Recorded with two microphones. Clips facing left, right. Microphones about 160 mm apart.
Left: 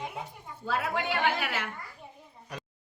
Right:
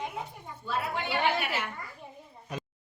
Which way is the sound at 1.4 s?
90° left.